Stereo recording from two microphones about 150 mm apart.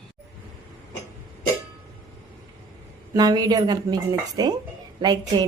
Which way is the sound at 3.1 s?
25° right (ahead or behind).